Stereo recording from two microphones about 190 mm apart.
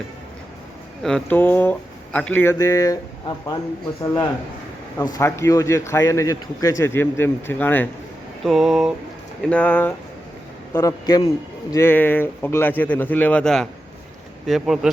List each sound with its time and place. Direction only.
1.0 s a man's voice: 5° left (ahead or behind)
5.1 s a man's voice: 15° left (ahead or behind)
8.4 s a man's voice: centre (ahead or behind)